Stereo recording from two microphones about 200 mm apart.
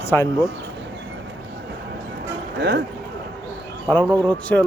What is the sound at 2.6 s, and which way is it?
Speech, 60° right (ahead or behind).